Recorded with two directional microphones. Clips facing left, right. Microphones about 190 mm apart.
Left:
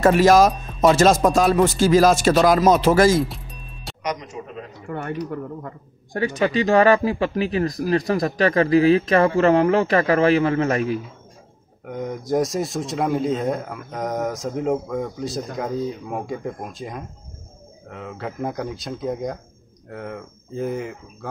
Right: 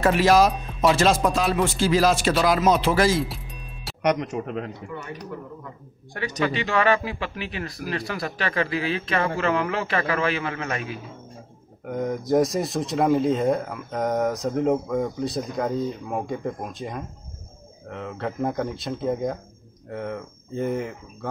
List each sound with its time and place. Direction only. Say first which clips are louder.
0.0 s speech: left 4 dB; 45° left (ahead or behind)
3.3 s music: even; centre (ahead or behind)
4.0 s speech: right 6 dB; 60° right (ahead or behind)
4.8 s speech: left 7 dB; 55° left (ahead or behind)
6.4 s speech: left 6 dB; 35° left (ahead or behind)
11.8 s speech: right 2 dB; centre (ahead or behind)